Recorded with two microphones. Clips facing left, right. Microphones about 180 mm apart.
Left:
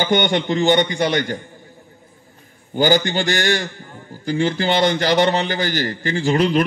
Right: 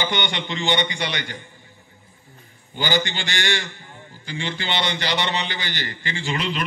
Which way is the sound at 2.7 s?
45° left (ahead or behind).